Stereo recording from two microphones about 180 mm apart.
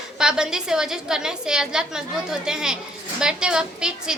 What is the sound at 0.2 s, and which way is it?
A woman's voice, 5° right (ahead or behind).